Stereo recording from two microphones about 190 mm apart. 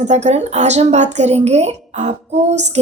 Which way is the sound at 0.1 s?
35° right (ahead or behind).